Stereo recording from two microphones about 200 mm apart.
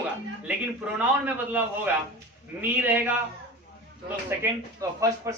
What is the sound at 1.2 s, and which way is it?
A man's voice, 10° right (ahead or behind).